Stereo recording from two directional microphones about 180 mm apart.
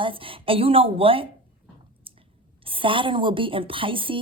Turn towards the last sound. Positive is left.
turn(degrees=-30)  # may be behind; listen again after turning